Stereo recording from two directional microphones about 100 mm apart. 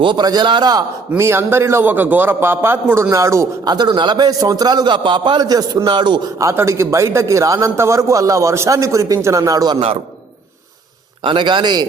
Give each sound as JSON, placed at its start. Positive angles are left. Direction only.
{"t": 0.0, "sound": "a man's voice", "side_deg": -50}
{"t": 1.2, "sound": "a man's voice", "side_deg": -25}
{"t": 3.6, "sound": "a man's voice", "side_deg": -45}
{"t": 6.4, "sound": "a man's voice", "side_deg": -30}
{"t": 11.2, "sound": "a man's voice", "side_deg": -55}